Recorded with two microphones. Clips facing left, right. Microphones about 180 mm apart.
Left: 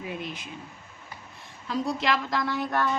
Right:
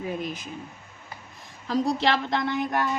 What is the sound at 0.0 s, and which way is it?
Speech, 40° right (ahead or behind).